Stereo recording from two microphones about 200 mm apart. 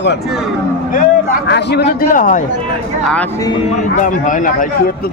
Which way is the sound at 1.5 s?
55° left (ahead or behind).